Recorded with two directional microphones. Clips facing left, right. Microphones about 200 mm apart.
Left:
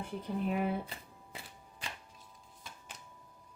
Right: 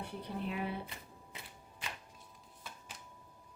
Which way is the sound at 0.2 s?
45° left (ahead or behind).